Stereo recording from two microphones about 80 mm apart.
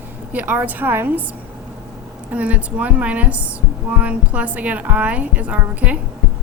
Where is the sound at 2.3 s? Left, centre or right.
Centre.